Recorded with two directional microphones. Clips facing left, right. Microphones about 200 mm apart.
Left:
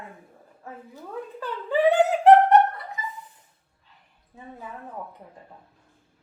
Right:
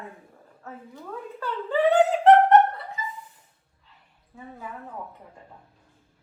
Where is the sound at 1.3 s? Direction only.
15° left (ahead or behind).